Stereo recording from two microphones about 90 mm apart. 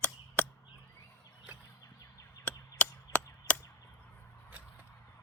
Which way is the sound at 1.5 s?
15° right (ahead or behind).